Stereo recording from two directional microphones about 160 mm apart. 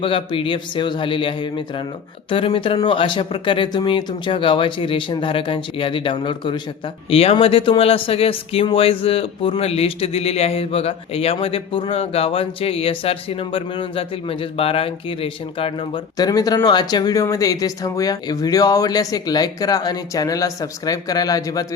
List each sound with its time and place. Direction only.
0.0 s speech: 35° left (ahead or behind)
16.1 s speech: 25° left (ahead or behind)